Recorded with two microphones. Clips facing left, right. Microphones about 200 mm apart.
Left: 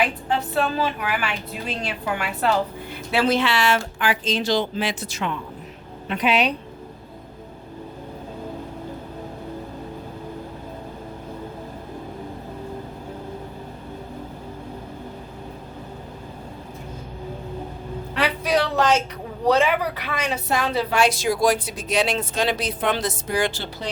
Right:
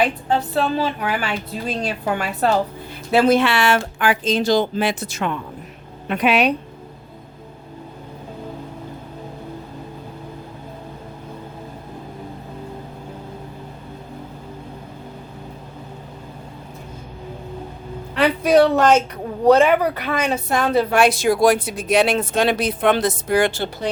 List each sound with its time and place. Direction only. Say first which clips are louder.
0.0 s a woman's voice: right 4 dB; 35° right (ahead or behind); by 6.5 s 55° right (ahead or behind)
18.2 s a sound: right 8 dB; 50° right (ahead or behind)
19.5 s a woman's voice: right 6 dB; 50° right (ahead or behind)